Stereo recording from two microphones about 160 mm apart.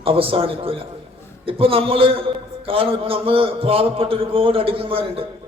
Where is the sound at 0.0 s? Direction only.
35° right (ahead or behind).